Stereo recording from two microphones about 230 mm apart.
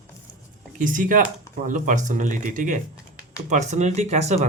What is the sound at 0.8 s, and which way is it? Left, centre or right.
Speech, right.